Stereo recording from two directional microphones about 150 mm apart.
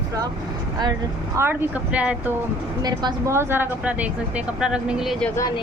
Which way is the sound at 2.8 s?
25° right (ahead or behind).